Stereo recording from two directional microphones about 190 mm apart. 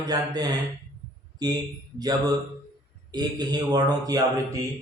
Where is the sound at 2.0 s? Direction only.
20° right (ahead or behind).